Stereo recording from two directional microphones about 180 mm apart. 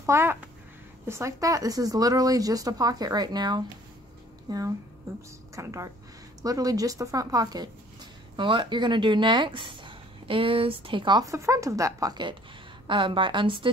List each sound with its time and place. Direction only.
0.0 s a child's voice: 15° right (ahead or behind)